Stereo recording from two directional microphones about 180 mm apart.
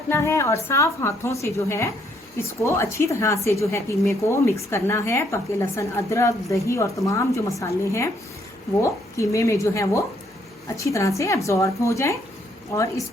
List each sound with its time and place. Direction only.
0.1 s speech: 15° left (ahead or behind)